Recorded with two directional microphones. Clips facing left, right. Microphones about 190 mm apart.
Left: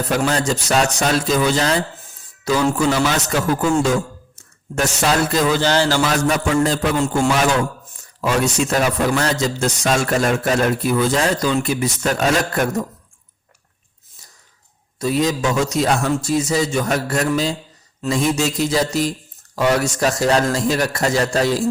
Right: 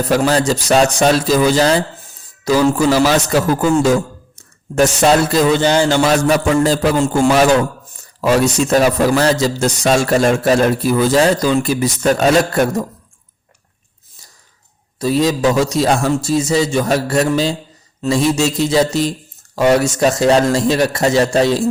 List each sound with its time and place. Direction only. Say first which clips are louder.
0.1 s a man's voice: right 5 dB; 35° right (ahead or behind)
4.7 s a man's voice: right 7 dB; 30° right (ahead or behind); by 6.0 s 15° right (ahead or behind)
6.0 s a man's voice: right 5 dB; 30° right (ahead or behind)
14.9 s a man's voice: right 4 dB; 30° right (ahead or behind)